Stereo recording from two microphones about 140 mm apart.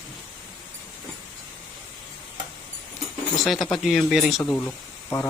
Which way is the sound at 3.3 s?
Centre (ahead or behind).